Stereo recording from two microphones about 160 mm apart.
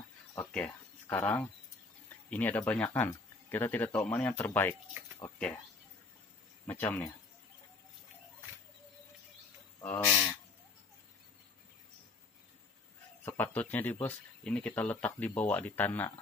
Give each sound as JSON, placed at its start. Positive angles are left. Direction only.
{"t": 0.5, "sound": "speech", "side_deg": 5}
{"t": 6.6, "sound": "speech", "side_deg": 10}
{"t": 9.8, "sound": "speech", "side_deg": 15}
{"t": 13.2, "sound": "speech", "side_deg": 10}